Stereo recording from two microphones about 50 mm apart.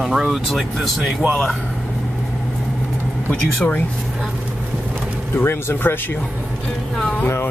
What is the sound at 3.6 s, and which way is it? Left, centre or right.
Speech, left.